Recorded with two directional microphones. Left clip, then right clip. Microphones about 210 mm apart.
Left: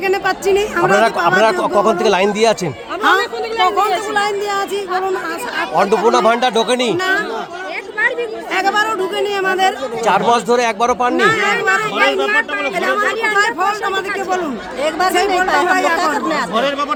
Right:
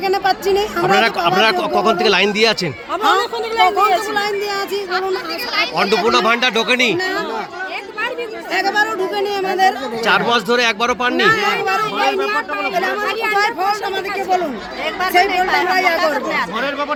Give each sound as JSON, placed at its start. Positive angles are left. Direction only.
{"t": 0.0, "sound": "speech", "side_deg": 0}
{"t": 3.6, "sound": "speech", "side_deg": -30}
{"t": 4.1, "sound": "speech", "side_deg": 0}
{"t": 5.7, "sound": "speech", "side_deg": 5}
{"t": 8.5, "sound": "speech", "side_deg": 5}
{"t": 13.2, "sound": "speech", "side_deg": 0}
{"t": 14.8, "sound": "speech", "side_deg": 40}